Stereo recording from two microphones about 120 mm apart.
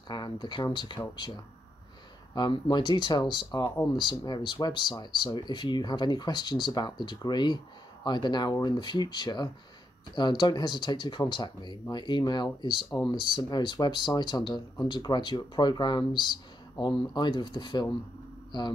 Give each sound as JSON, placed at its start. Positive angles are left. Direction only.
{"t": 0.1, "sound": "speech", "side_deg": 35}